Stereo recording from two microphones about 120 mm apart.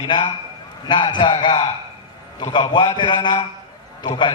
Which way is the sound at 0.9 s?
40° left (ahead or behind).